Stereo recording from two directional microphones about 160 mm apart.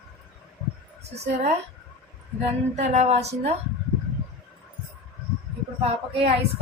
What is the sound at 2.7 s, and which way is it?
Speech, 45° right (ahead or behind).